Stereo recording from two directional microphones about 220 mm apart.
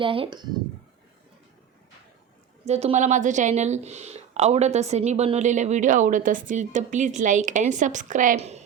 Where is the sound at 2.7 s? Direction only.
30° right (ahead or behind).